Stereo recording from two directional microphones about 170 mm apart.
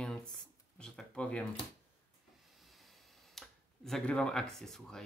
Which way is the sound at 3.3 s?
Centre (ahead or behind).